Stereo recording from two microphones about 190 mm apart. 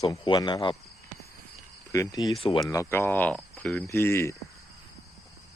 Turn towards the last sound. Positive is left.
turn(degrees=15)  # may be behind; listen again after turning